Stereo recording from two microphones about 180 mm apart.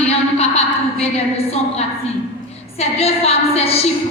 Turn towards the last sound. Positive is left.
turn(degrees=35)  # may be behind; listen again after turning